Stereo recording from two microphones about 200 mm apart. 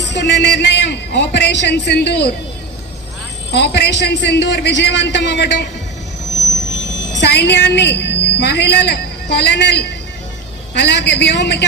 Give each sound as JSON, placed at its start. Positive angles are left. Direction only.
{"t": 0.1, "sound": "a man's voice", "side_deg": 60}
{"t": 3.5, "sound": "a man's voice", "side_deg": 55}
{"t": 7.2, "sound": "a woman's voice", "side_deg": 55}